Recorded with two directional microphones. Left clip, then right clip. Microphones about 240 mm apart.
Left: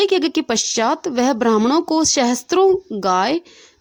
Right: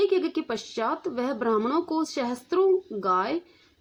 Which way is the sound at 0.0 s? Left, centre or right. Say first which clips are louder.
Left 7 dB; left.